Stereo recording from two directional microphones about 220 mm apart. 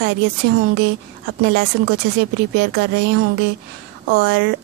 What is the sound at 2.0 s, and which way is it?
A woman's voice, 50° right (ahead or behind).